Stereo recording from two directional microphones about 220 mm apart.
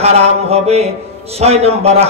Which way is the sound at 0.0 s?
30° right (ahead or behind).